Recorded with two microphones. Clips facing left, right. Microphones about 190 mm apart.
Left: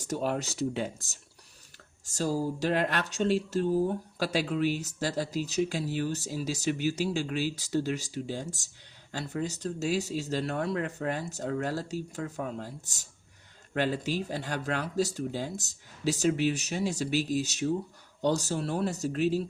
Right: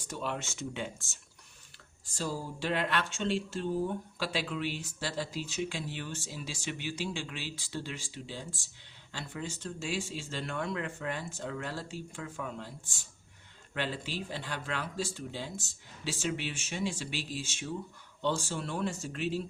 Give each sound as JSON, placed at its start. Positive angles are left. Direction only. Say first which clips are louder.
{"t": 0.0, "sound": "speech", "louder": "left 7 dB", "side_deg": 45}